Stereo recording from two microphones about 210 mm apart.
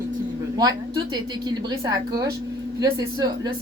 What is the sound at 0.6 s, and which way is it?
A woman's voice, 20° right (ahead or behind).